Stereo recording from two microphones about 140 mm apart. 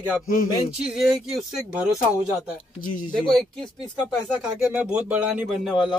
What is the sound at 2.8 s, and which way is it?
Speech, 80° left.